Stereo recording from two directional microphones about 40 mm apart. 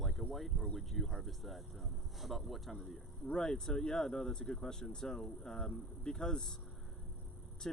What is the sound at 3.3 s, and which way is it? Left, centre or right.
Speech, centre.